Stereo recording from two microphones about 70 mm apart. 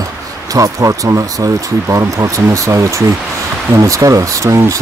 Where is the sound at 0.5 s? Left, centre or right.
Right.